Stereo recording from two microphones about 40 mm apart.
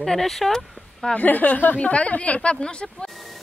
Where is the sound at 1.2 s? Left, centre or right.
Left.